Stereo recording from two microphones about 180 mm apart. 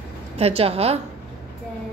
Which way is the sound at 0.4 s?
35° right (ahead or behind).